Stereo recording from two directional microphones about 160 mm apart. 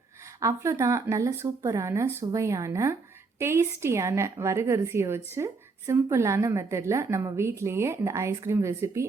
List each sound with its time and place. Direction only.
0.3 s speech: 20° right (ahead or behind)